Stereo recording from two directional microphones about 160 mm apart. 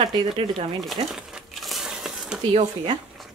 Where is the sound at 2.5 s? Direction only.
35° right (ahead or behind).